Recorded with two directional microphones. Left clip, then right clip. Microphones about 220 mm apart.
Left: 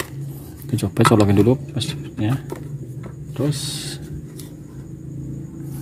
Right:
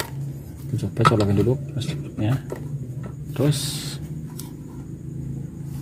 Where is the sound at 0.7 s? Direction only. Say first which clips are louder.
Left 3 dB; 25° left (ahead or behind).